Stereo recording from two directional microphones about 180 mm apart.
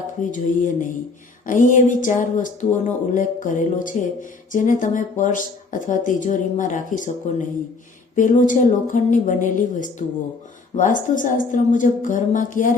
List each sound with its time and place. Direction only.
0.2 s speech: 45° left (ahead or behind)